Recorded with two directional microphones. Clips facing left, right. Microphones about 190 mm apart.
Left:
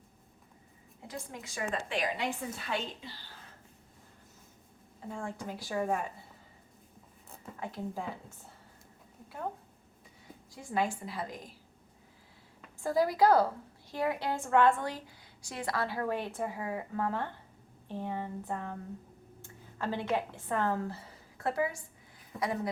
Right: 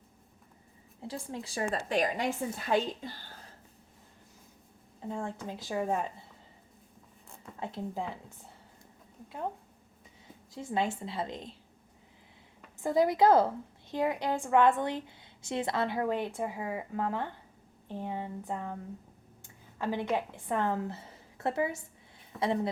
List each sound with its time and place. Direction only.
1.0 s a woman's voice: 30° right (ahead or behind)
5.0 s a woman's voice: 20° right (ahead or behind)
7.6 s a woman's voice: 20° right (ahead or behind)
10.5 s a woman's voice: 25° right (ahead or behind)
12.8 s a woman's voice: 20° right (ahead or behind)